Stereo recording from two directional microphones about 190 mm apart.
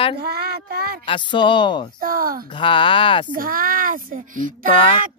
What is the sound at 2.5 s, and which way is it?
Speech, 25° left (ahead or behind).